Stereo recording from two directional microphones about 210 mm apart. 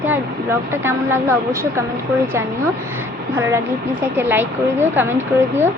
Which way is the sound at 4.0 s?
10° right (ahead or behind).